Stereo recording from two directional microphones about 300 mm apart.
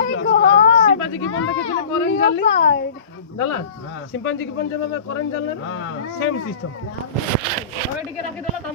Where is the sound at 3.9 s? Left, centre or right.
Left.